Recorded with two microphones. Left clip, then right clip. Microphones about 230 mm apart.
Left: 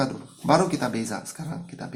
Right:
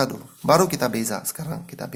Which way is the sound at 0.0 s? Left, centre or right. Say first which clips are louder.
Right 4 dB; right.